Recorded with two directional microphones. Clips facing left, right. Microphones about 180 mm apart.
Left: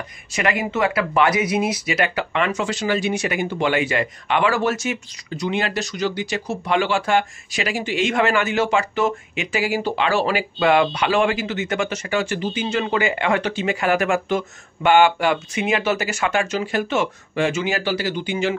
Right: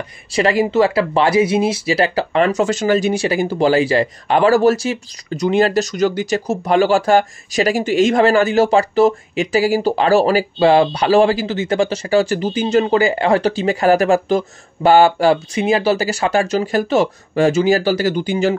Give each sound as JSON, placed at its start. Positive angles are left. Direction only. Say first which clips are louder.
{"t": 0.3, "sound": "speech", "louder": "right 7 dB", "side_deg": -30}